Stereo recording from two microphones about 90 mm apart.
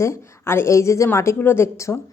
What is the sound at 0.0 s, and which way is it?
Speech, 30° left (ahead or behind).